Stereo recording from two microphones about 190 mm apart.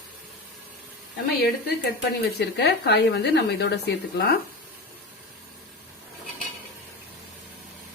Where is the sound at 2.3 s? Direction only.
60° left (ahead or behind).